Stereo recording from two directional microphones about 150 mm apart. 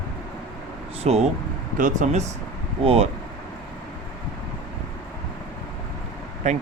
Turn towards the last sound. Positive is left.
turn(degrees=-50)  # may be behind; listen again after turning